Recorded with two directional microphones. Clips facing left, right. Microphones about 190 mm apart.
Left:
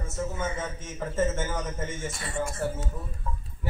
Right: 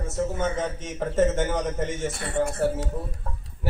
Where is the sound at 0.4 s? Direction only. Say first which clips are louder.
Right 5 dB; 70° right (ahead or behind).